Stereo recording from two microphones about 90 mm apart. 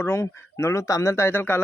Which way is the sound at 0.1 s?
30° left (ahead or behind).